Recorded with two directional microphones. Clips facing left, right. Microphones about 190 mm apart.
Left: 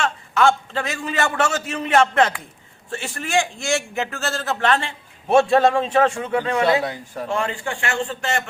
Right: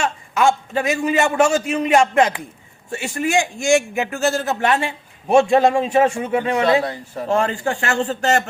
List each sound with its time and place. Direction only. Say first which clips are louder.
0.0 s a man's voice: right 1 dB; 15° right (ahead or behind)
7.3 s a man's voice: right 6 dB; 40° right (ahead or behind)